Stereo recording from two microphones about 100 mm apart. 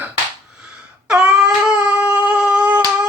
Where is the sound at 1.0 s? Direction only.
10° right (ahead or behind).